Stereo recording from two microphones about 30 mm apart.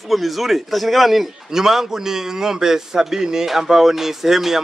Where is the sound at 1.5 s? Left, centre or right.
Centre.